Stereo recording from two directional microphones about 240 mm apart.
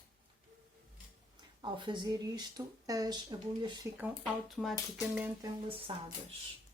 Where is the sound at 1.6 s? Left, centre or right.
Centre.